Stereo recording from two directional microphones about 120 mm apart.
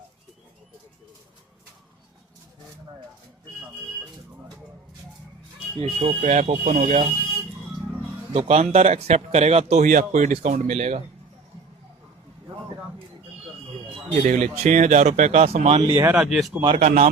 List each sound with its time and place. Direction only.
5.8 s speech: 50° right (ahead or behind)
6.4 s speech: 70° right (ahead or behind)
8.3 s a man's voice: 60° right (ahead or behind)
14.1 s speech: 90° right; by 16.0 s 50° right (ahead or behind)
16.0 s speech: 15° right (ahead or behind)
16.7 s speech: 70° right (ahead or behind)